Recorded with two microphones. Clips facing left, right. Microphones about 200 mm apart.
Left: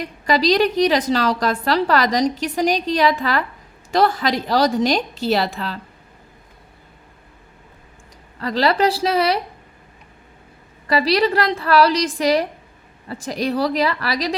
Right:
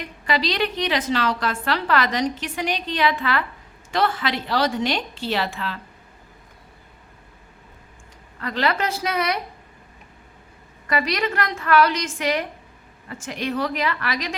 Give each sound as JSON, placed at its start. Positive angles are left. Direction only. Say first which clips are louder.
{"t": 0.0, "sound": "a woman's voice", "louder": "left 6 dB", "side_deg": 40}
{"t": 8.4, "sound": "a woman's voice", "louder": "left 6 dB", "side_deg": 35}
{"t": 10.8, "sound": "a woman's voice", "louder": "left 6 dB", "side_deg": 30}